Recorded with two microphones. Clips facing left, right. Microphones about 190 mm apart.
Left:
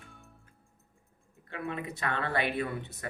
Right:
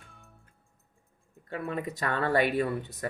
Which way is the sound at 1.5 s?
40° right (ahead or behind).